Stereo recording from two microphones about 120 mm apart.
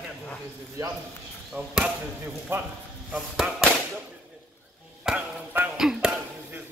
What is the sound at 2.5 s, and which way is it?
Speech, 15° right (ahead or behind).